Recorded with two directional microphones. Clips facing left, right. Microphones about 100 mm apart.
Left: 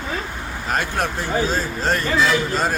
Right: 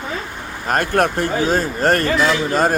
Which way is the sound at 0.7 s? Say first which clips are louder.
Right 6 dB; 55° right (ahead or behind).